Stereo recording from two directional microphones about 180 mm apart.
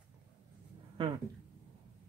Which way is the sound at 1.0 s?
30° right (ahead or behind).